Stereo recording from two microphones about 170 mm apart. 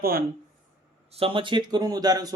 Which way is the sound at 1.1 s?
30° right (ahead or behind).